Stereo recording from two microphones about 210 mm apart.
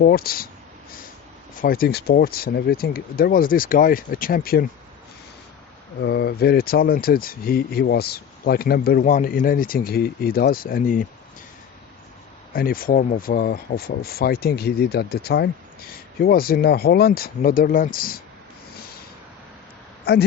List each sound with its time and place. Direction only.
0.0 s speech: 45° left (ahead or behind)
1.6 s speech: 45° left (ahead or behind)
6.0 s speech: 50° left (ahead or behind)
12.5 s speech: 45° left (ahead or behind)
20.1 s speech: 50° left (ahead or behind)